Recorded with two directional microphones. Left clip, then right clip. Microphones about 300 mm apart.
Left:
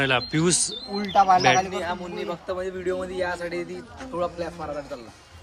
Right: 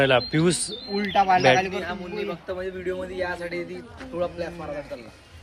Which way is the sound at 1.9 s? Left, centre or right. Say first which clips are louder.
Left 3 dB; left.